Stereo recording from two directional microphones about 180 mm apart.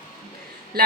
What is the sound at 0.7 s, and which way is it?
Speech, 55° right (ahead or behind).